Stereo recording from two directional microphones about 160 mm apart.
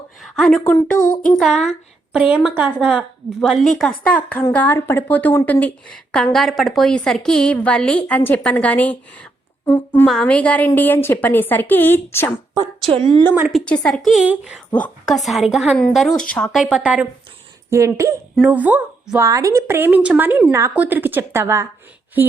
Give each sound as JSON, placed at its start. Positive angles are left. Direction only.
{"t": 0.2, "sound": "a woman's voice", "side_deg": 0}
{"t": 0.9, "sound": "child singing", "side_deg": 55}
{"t": 1.3, "sound": "a woman's voice", "side_deg": 0}
{"t": 12.9, "sound": "speech", "side_deg": -30}
{"t": 13.5, "sound": "a woman's voice", "side_deg": 5}
{"t": 18.3, "sound": "a woman's voice", "side_deg": -10}